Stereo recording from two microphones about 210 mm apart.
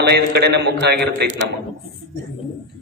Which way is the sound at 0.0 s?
50° right (ahead or behind).